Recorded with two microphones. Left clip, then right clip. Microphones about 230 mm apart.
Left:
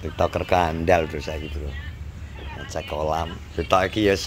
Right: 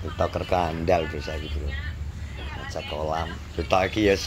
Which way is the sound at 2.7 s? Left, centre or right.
Left.